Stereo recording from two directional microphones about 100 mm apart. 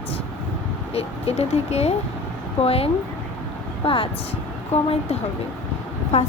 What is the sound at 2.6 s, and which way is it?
Speech, 80° left.